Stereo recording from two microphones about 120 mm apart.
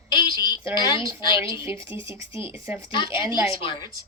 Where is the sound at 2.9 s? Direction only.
45° left (ahead or behind).